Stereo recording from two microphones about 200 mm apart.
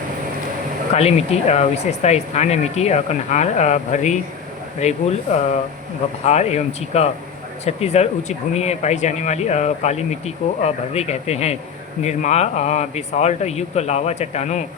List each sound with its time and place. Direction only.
0.9 s speech: 30° left (ahead or behind)